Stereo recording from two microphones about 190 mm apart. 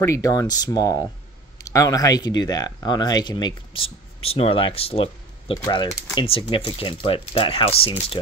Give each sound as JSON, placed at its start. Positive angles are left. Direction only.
{"t": 0.0, "sound": "speech", "side_deg": 15}